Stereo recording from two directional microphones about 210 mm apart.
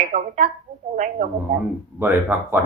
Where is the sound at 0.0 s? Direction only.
35° right (ahead or behind).